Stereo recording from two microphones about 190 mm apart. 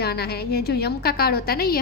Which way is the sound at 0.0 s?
55° left (ahead or behind).